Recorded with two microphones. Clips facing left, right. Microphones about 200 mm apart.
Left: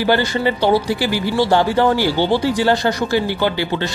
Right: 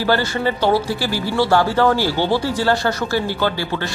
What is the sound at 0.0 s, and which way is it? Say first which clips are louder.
Speech: left 2 dB; 15° left (ahead or behind).